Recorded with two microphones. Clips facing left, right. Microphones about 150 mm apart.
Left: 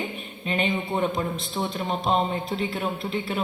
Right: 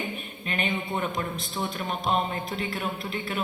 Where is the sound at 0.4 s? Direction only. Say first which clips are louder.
Left 4 dB; 25° left (ahead or behind).